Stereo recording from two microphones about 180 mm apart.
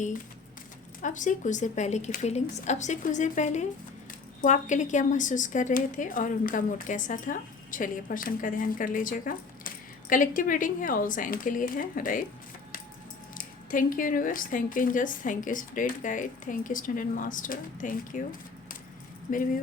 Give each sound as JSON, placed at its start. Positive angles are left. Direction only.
{"t": 1.0, "sound": "speech", "side_deg": 45}
{"t": 13.3, "sound": "speech", "side_deg": 50}